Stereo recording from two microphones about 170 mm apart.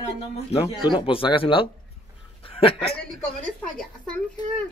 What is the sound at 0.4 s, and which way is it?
Speech, 35° left (ahead or behind).